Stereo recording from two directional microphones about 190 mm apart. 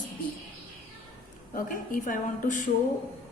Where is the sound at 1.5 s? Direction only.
45° left (ahead or behind).